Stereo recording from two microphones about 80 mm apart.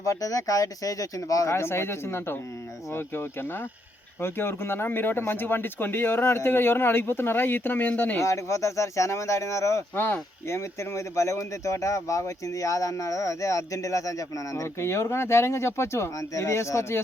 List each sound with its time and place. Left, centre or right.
0.0 s speech: left
4.2 s speech: left
8.2 s speech: left
9.9 s speech: left
10.9 s speech: left